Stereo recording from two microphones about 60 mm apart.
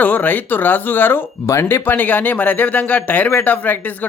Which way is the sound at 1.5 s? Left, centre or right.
Left.